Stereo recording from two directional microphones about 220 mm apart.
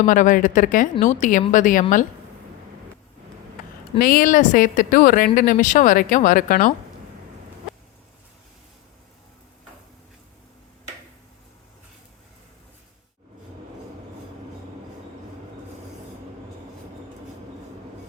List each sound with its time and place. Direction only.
0.0 s speech: 35° left (ahead or behind)
3.9 s speech: 40° left (ahead or behind)